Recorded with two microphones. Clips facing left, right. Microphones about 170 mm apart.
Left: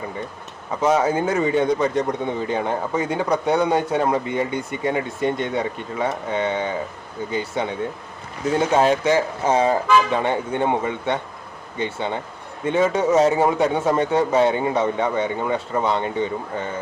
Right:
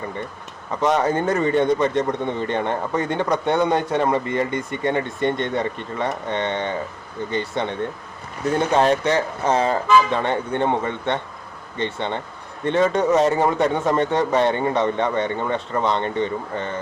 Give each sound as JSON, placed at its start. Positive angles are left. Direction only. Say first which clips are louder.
{"t": 0.7, "sound": "speech", "louder": "left 1 dB", "side_deg": 5}